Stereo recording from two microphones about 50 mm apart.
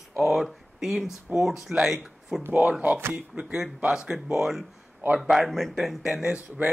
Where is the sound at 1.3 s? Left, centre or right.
Right.